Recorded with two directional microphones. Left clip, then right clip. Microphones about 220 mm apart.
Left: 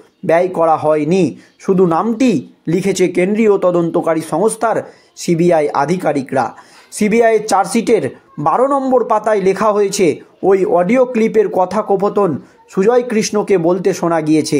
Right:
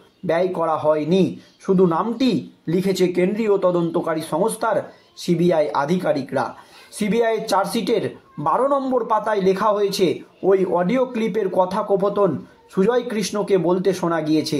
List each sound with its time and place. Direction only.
0.3 s speech: 35° left (ahead or behind)